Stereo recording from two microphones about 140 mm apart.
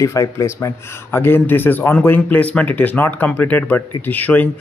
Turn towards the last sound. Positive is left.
turn(degrees=10)  # may be behind; listen again after turning